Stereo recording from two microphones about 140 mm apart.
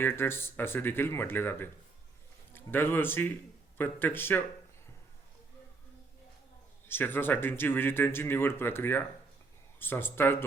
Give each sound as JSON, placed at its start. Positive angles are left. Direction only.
{"t": 0.0, "sound": "speech", "side_deg": 15}
{"t": 6.8, "sound": "speech", "side_deg": 15}